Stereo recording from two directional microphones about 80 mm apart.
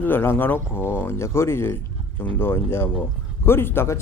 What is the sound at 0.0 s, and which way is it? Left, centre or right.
Speech, left.